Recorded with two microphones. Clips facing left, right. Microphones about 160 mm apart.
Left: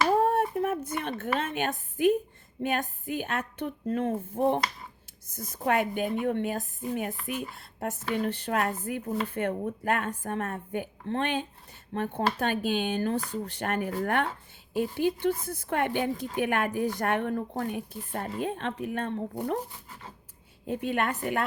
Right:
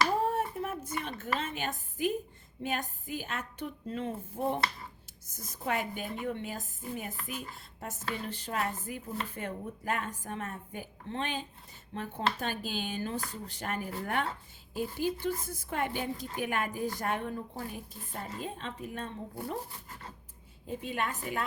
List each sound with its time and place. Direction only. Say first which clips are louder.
0.3 s a sound: left 6 dB; 60° left (ahead or behind)
1.4 s speech: left 6 dB; 60° left (ahead or behind)
20.7 s speech: left 6 dB; 65° left (ahead or behind)